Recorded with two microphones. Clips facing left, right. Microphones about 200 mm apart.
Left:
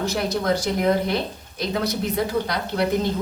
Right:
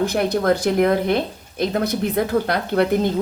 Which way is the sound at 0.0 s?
55° right (ahead or behind).